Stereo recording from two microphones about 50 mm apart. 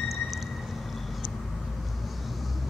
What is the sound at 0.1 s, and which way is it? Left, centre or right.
Vehicle, centre.